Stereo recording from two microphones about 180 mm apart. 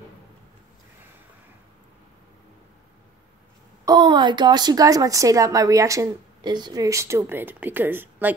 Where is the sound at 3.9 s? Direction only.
25° right (ahead or behind).